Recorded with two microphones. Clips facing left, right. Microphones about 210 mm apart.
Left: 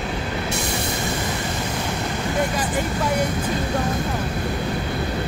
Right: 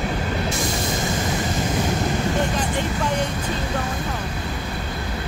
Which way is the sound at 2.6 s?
10° left (ahead or behind).